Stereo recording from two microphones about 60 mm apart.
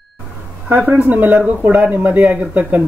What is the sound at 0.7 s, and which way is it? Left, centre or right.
Speech, right.